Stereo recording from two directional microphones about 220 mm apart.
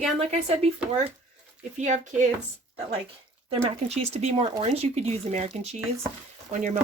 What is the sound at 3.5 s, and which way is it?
Speech, 30° right (ahead or behind).